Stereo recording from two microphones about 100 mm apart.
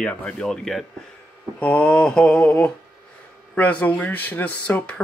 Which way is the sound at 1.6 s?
15° left (ahead or behind).